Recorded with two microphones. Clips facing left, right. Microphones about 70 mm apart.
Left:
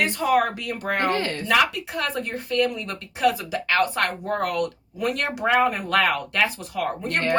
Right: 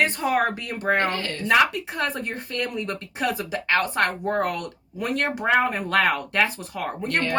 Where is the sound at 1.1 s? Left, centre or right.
Left.